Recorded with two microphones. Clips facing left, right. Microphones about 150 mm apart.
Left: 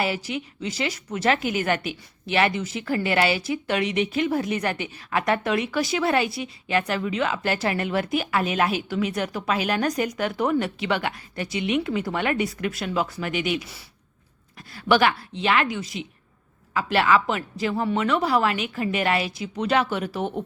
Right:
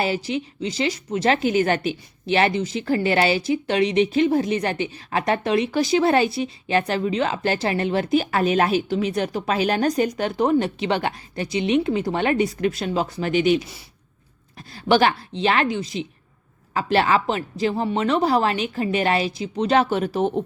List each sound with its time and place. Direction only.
0.0 s a woman's voice: 25° right (ahead or behind)
14.7 s a woman's voice: 30° right (ahead or behind)